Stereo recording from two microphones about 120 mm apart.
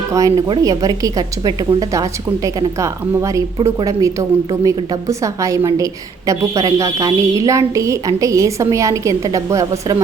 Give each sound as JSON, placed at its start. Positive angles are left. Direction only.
{"t": 0.1, "sound": "a woman's voice", "side_deg": -30}